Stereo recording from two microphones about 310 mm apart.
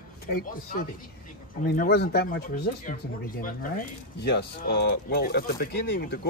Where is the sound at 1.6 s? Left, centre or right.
Left.